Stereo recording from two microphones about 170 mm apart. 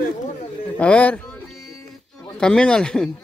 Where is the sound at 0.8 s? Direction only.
10° left (ahead or behind).